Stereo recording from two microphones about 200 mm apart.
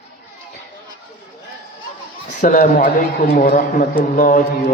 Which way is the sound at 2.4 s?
40° left (ahead or behind).